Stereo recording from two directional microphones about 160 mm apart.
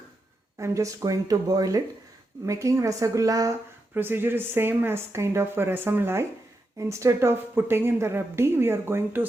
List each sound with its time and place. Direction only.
0.6 s a woman's voice: 20° right (ahead or behind)